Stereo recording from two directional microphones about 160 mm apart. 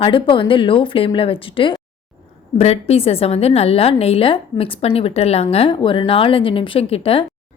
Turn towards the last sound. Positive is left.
turn(degrees=35)  # may be behind; listen again after turning